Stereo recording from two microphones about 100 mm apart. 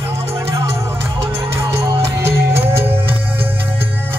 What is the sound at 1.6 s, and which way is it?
Music, 25° right (ahead or behind).